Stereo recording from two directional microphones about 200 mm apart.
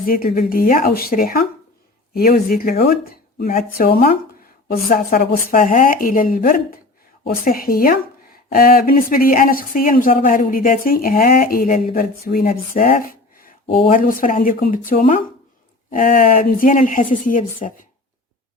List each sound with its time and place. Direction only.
0.0 s speech: 45° left (ahead or behind)